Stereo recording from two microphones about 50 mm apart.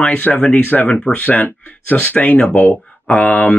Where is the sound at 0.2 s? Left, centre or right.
Left.